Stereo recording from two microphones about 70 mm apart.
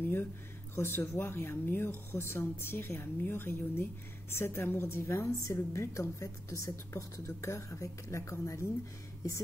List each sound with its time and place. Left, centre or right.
0.7 s a woman's voice: left